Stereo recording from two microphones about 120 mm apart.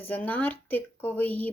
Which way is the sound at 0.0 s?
15° left (ahead or behind).